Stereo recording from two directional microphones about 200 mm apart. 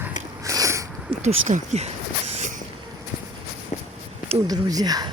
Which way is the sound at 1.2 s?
35° right (ahead or behind).